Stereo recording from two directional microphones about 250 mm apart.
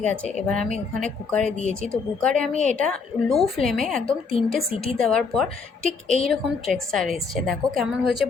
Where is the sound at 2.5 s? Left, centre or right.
Right.